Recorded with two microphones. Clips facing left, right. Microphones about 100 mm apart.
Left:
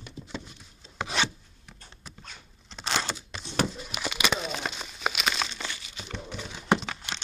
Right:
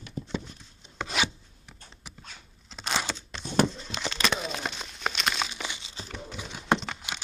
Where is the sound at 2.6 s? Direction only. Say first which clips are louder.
Even; centre (ahead or behind).